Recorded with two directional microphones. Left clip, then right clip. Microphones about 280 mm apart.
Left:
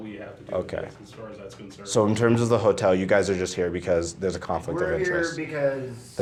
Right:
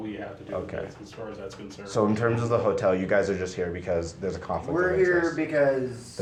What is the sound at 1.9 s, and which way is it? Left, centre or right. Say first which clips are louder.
Speech: left 3 dB; left.